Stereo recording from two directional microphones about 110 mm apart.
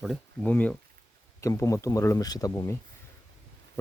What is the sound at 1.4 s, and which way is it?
Speech, 30° left (ahead or behind).